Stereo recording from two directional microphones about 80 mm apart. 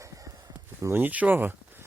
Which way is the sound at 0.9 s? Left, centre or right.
Right.